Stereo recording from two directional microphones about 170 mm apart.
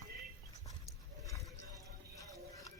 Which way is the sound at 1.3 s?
20° left (ahead or behind).